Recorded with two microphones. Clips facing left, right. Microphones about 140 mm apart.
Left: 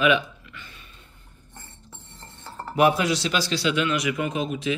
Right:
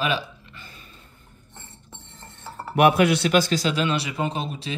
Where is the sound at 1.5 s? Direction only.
25° right (ahead or behind).